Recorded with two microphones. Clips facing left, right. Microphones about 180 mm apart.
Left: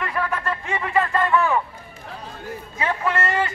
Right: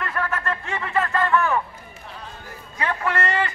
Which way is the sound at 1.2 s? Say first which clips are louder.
Right 1 dB; 15° left (ahead or behind).